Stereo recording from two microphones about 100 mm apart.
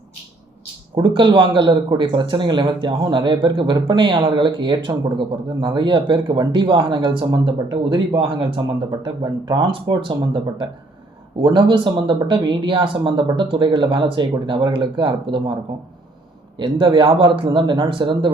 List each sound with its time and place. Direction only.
0.9 s speech: 50° right (ahead or behind)
16.6 s speech: 55° right (ahead or behind)